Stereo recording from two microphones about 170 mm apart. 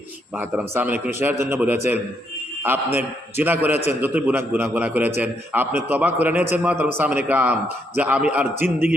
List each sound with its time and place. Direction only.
0.3 s a man's voice: 10° right (ahead or behind)